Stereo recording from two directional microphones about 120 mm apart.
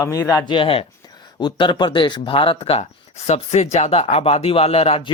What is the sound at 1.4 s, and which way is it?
Speech, 40° left (ahead or behind).